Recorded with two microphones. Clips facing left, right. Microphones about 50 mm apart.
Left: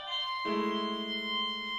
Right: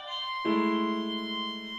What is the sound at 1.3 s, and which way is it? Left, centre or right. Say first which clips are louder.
Music: even; centre.